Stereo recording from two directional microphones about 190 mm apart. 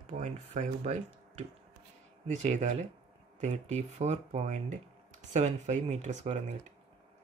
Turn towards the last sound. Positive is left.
turn(degrees=-35)  # may be behind; listen again after turning